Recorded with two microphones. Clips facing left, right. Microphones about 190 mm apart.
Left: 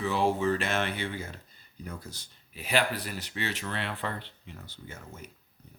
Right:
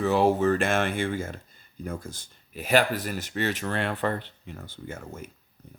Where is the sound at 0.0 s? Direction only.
45° right (ahead or behind).